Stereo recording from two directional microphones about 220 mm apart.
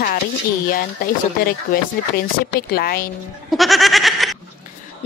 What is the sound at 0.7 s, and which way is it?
Speech, 40° left (ahead or behind).